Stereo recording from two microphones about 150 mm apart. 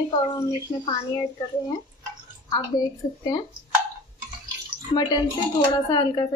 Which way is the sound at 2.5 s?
25° left (ahead or behind).